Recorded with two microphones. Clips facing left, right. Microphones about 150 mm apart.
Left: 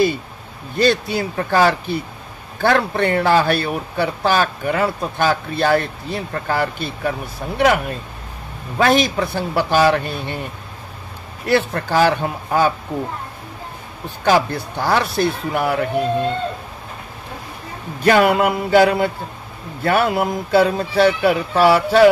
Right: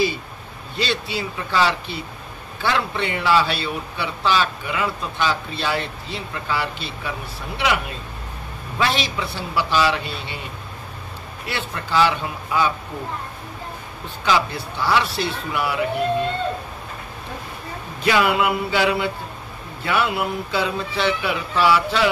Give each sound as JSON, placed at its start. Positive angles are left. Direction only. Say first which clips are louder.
{"t": 0.7, "sound": "a man's voice", "louder": "left 8 dB", "side_deg": 50}
{"t": 11.4, "sound": "a man's voice", "louder": "left 11 dB", "side_deg": 45}
{"t": 14.2, "sound": "a man's voice", "louder": "left 5 dB", "side_deg": 50}
{"t": 18.0, "sound": "a man's voice", "louder": "left 5 dB", "side_deg": 45}